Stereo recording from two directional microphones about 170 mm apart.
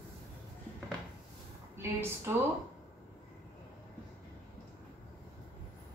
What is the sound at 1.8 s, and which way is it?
Speech, 15° right (ahead or behind).